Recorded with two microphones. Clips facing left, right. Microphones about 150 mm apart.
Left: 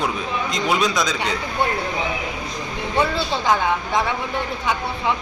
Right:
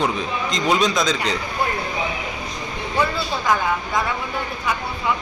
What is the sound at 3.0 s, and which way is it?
Speech, 25° left (ahead or behind).